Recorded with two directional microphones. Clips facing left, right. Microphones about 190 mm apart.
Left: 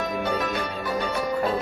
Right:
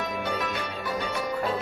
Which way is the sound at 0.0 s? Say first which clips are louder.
Left 4 dB; 40° left (ahead or behind).